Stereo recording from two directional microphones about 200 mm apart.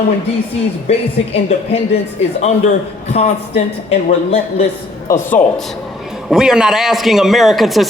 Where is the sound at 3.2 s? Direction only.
30° left (ahead or behind).